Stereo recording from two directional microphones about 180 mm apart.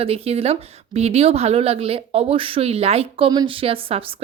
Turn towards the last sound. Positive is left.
turn(degrees=-30)  # may be behind; listen again after turning